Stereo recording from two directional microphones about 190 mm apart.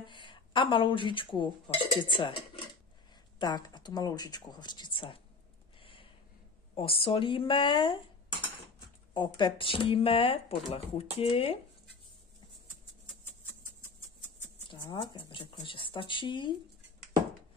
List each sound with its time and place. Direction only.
0.0 s speech: 25° left (ahead or behind)
5.8 s a sound: 25° left (ahead or behind)
6.8 s speech: 30° left (ahead or behind)
9.1 s speech: 25° left (ahead or behind)
14.7 s speech: 25° left (ahead or behind)